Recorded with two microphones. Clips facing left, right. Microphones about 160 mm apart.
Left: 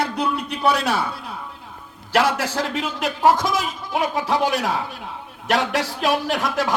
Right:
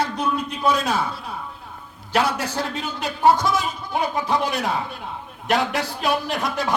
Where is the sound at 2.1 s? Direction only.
90° left.